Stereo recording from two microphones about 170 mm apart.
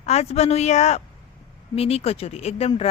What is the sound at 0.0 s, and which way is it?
A woman's voice, 40° left (ahead or behind).